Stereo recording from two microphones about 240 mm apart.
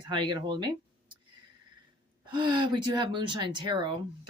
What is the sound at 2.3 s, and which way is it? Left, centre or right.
Speech, centre.